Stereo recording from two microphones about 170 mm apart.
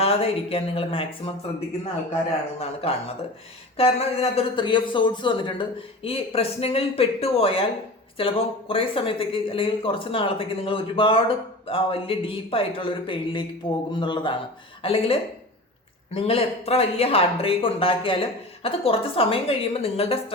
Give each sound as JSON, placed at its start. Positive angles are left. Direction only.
{"t": 0.0, "sound": "speech", "side_deg": 35}
{"t": 3.8, "sound": "a man's voice", "side_deg": 35}